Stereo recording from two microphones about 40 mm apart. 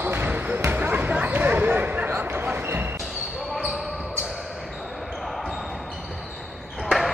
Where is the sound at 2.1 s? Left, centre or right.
Right.